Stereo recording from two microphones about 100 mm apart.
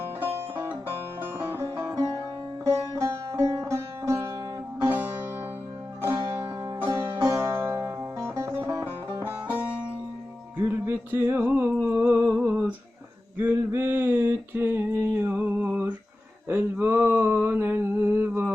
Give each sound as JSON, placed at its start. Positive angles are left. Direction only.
{"t": 0.3, "sound": "music", "side_deg": -25}
{"t": 7.2, "sound": "music", "side_deg": -35}
{"t": 12.5, "sound": "humming", "side_deg": -15}
{"t": 13.3, "sound": "a sound", "side_deg": -20}